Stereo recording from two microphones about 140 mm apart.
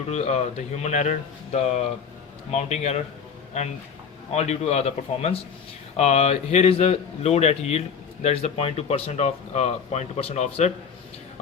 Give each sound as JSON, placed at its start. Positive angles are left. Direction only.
{"t": 0.1, "sound": "speech", "side_deg": 50}